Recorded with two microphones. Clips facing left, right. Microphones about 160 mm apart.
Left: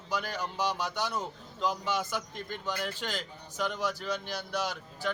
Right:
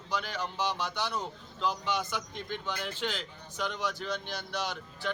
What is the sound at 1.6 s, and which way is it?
A man's voice, 5° left (ahead or behind).